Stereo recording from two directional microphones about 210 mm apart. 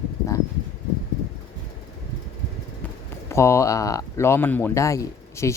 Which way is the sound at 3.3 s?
15° left (ahead or behind).